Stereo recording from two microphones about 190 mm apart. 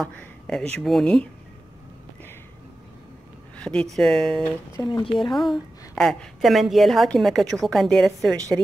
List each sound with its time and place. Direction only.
0.0 s a woman's voice: 5° left (ahead or behind)
3.5 s a sound: 5° left (ahead or behind)
3.9 s a woman's voice: centre (ahead or behind)
4.7 s speech: 20° left (ahead or behind)
5.9 s a woman's voice: centre (ahead or behind)